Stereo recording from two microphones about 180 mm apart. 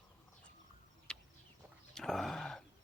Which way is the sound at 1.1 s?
5° left (ahead or behind).